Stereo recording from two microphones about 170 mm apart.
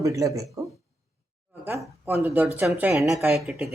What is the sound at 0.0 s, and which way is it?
Speech, 20° right (ahead or behind).